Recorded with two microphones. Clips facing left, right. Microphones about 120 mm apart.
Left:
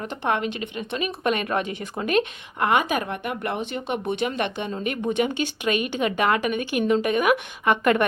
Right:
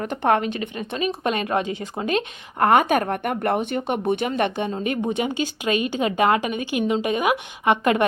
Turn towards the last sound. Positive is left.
turn(degrees=-25)  # may be behind; listen again after turning